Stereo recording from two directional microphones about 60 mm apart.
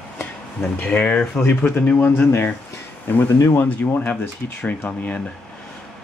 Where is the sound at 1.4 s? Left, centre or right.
Left.